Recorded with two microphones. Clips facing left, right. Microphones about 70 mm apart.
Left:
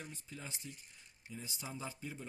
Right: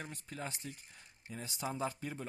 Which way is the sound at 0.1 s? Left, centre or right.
Right.